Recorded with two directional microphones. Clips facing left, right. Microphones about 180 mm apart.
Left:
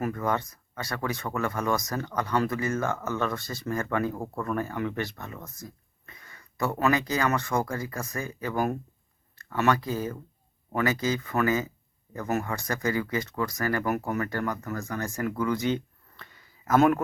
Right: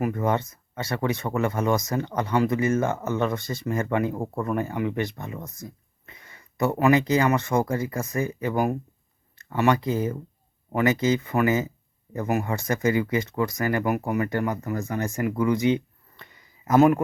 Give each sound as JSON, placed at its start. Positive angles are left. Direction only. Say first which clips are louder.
{"t": 0.0, "sound": "speech", "louder": "right 4 dB", "side_deg": -20}